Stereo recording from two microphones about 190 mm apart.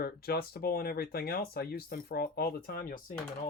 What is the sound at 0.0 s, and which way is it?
Speech, 55° left (ahead or behind).